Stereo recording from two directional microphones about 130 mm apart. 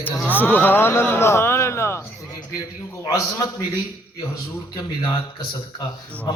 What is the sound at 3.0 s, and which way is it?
Speech, 25° left (ahead or behind).